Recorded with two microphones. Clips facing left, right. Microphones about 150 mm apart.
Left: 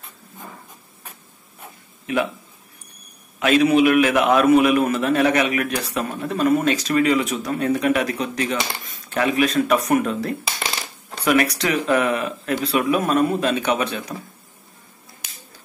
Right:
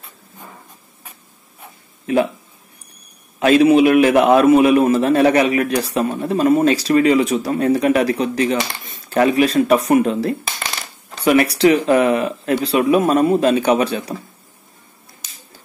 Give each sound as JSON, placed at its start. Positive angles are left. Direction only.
{"t": 3.3, "sound": "a man's voice", "side_deg": -30}